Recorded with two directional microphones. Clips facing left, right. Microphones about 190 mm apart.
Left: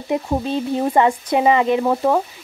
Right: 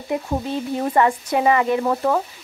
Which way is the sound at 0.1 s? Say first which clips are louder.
Left 3 dB; 20° left (ahead or behind).